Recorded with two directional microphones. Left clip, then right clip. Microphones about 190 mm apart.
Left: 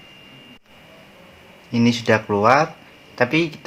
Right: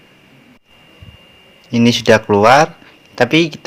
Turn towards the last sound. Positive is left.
turn(degrees=-35)  # may be behind; listen again after turning